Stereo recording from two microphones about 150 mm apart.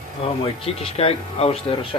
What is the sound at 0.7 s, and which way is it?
Speech, 40° left (ahead or behind).